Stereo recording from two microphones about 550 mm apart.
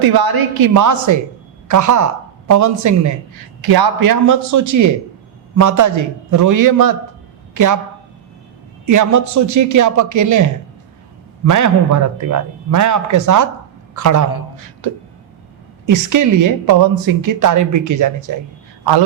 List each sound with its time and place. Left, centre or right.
0.0 s a woman's voice: right
8.9 s a woman's voice: right
15.9 s a woman's voice: right